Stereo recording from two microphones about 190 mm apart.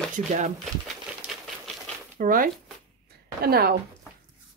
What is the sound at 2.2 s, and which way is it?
Speech, 50° right (ahead or behind).